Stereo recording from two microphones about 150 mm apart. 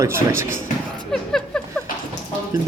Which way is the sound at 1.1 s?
5° left (ahead or behind).